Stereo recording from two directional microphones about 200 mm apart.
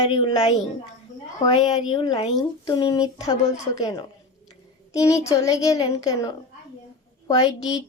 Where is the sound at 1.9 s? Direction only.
20° left (ahead or behind).